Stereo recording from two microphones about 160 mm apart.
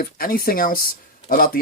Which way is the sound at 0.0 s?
65° left (ahead or behind).